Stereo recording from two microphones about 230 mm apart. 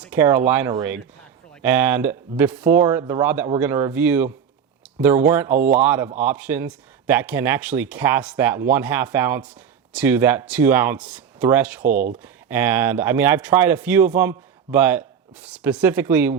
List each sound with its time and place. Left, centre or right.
0.0 s a sound: centre
0.5 s a man's voice: centre
11.9 s speech: right
12.2 s a man's voice: centre